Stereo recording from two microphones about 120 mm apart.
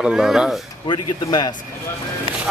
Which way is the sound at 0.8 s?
35° left (ahead or behind).